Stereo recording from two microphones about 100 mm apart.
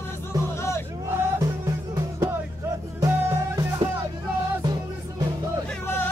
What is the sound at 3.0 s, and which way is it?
Music, 30° right (ahead or behind).